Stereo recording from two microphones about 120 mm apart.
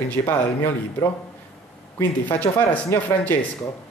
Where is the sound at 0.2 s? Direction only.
30° left (ahead or behind).